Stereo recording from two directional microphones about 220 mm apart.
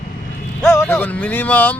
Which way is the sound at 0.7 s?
10° left (ahead or behind).